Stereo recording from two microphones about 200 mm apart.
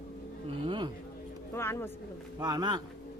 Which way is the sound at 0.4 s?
25° right (ahead or behind).